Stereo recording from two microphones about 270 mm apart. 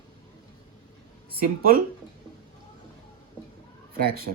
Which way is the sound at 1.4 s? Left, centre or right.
Right.